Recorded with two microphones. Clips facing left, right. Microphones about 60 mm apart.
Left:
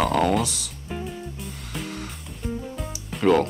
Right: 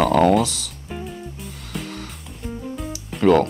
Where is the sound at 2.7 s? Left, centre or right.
Centre.